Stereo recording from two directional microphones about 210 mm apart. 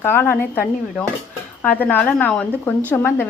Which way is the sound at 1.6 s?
5° left (ahead or behind).